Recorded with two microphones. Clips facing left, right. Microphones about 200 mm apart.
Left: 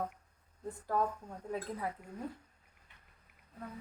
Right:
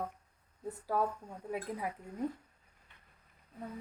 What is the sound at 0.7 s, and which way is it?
Speech, 5° right (ahead or behind).